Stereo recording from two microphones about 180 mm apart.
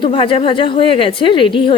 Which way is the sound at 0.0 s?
30° left (ahead or behind).